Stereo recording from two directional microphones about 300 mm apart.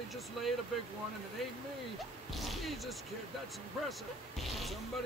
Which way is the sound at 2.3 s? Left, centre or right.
Centre.